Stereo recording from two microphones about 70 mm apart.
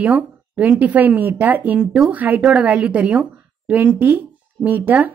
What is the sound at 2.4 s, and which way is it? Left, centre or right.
A woman's voice, centre.